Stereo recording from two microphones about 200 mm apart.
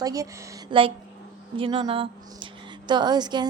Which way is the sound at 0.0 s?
15° right (ahead or behind).